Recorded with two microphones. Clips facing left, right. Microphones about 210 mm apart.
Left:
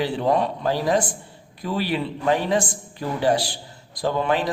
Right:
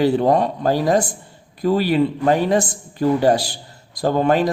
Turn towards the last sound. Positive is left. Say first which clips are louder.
# right 5 dB
turn(degrees=-45)  # may be behind; listen again after turning